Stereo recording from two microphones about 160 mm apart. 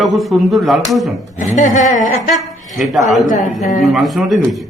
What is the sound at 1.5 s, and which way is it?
Speech, 50° left (ahead or behind).